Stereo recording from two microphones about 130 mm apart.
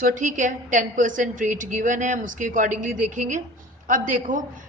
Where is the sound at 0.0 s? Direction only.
85° right.